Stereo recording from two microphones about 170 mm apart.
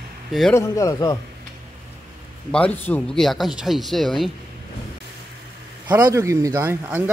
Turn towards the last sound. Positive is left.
turn(degrees=-10)  # may be behind; listen again after turning